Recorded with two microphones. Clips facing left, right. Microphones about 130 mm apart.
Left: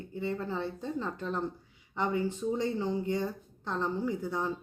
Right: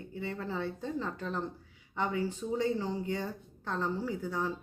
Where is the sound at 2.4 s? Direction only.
5° left (ahead or behind).